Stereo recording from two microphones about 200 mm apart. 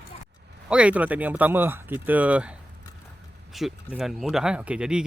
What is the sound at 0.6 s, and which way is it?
Speech, 5° right (ahead or behind).